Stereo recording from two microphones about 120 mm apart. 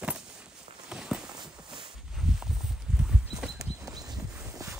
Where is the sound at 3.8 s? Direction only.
30° right (ahead or behind).